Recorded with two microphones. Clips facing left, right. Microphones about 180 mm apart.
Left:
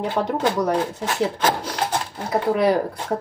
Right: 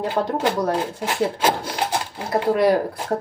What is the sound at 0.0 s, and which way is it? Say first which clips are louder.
Speech: even; 5° right (ahead or behind).